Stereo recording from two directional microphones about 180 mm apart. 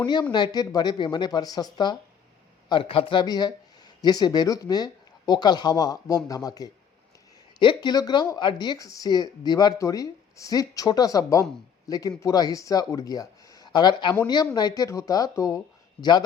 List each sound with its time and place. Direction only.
0.0 s speech: 25° left (ahead or behind)